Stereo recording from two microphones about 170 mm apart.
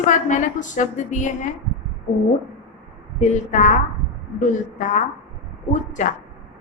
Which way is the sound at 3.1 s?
45° left (ahead or behind).